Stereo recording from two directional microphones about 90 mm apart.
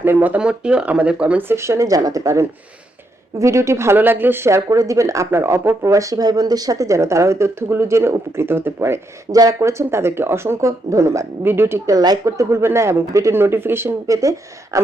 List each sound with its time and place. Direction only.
0.0 s speech: 20° right (ahead or behind)
1.5 s speech: 30° right (ahead or behind)
9.3 s speech: 40° right (ahead or behind)
11.9 s speech: 45° right (ahead or behind)